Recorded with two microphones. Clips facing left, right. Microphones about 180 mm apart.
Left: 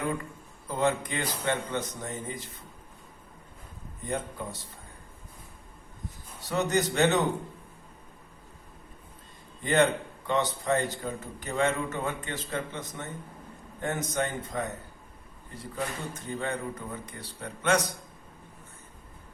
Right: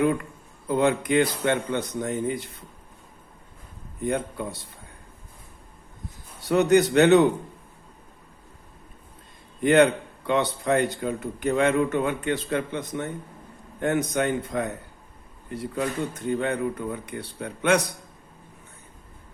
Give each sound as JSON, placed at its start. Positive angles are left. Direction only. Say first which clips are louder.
{"t": 0.7, "sound": "speech", "louder": "right 7 dB", "side_deg": -65}
{"t": 4.0, "sound": "speech", "louder": "right 6 dB", "side_deg": -65}
{"t": 6.5, "sound": "speech", "louder": "right 9 dB", "side_deg": -65}
{"t": 9.6, "sound": "speech", "louder": "right 6 dB", "side_deg": -65}